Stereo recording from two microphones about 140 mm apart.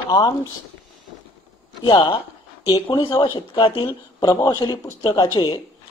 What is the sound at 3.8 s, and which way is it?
Speech, 25° left (ahead or behind).